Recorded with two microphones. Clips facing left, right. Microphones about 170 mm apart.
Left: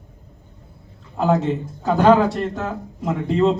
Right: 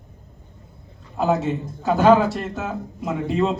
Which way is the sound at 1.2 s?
5° right (ahead or behind).